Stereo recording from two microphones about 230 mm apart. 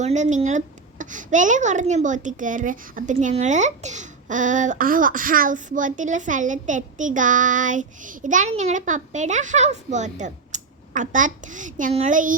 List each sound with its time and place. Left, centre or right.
0.0 s speech: right